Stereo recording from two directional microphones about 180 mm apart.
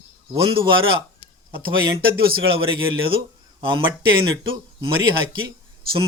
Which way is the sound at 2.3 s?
30° right (ahead or behind).